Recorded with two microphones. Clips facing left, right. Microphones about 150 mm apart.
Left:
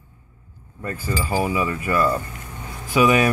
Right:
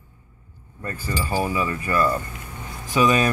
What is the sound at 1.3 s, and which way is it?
Speech, 10° left (ahead or behind).